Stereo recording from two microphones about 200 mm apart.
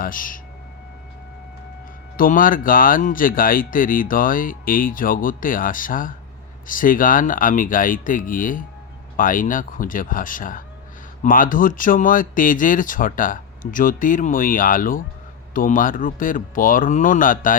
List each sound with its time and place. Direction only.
0.0 s speech: 45° left (ahead or behind)
2.1 s speech: 45° left (ahead or behind)